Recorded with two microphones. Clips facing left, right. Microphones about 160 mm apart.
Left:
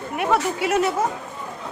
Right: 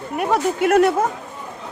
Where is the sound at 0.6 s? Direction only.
55° right (ahead or behind).